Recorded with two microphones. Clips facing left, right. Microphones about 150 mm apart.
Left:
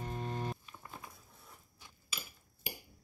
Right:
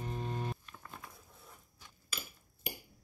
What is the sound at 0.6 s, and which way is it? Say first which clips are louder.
Patter: left 1 dB; 5° left (ahead or behind).